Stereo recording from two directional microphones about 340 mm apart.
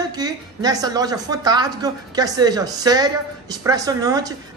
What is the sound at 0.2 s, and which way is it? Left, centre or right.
A woman's voice, centre.